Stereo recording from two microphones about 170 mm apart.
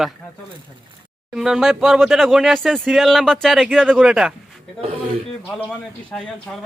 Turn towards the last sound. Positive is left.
turn(degrees=10)  # may be behind; listen again after turning